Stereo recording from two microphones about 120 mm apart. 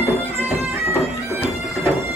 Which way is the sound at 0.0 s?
15° right (ahead or behind).